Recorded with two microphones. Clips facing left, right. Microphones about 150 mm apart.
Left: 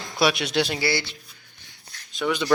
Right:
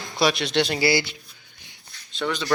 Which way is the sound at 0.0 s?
Centre (ahead or behind).